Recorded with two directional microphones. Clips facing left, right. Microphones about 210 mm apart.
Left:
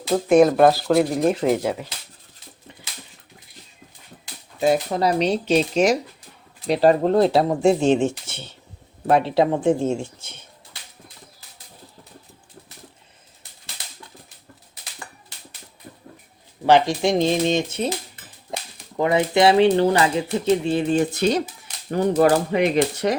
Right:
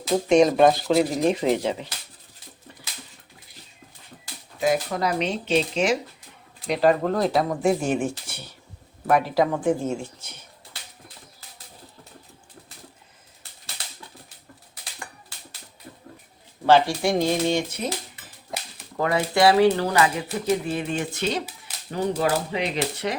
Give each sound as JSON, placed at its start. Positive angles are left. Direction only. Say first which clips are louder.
{"t": 0.3, "sound": "speech", "louder": "left 3 dB", "side_deg": 5}
{"t": 4.6, "sound": "speech", "louder": "left 4 dB", "side_deg": 30}
{"t": 6.7, "sound": "speech", "louder": "left 4 dB", "side_deg": 30}
{"t": 16.6, "sound": "speech", "louder": "left 2 dB", "side_deg": 20}
{"t": 18.9, "sound": "speech", "louder": "left 4 dB", "side_deg": 20}
{"t": 21.8, "sound": "speech", "louder": "left 7 dB", "side_deg": 50}